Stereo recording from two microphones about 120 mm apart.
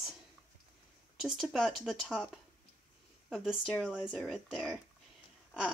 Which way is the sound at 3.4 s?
Centre (ahead or behind).